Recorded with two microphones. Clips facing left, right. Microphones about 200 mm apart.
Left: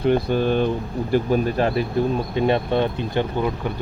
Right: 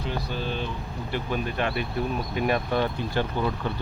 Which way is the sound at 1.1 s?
40° left (ahead or behind).